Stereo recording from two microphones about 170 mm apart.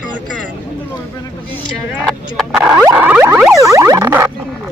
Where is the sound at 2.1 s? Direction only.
Centre (ahead or behind); by 4.2 s 15° right (ahead or behind).